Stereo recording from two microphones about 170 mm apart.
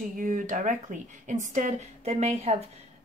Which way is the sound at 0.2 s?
50° right (ahead or behind).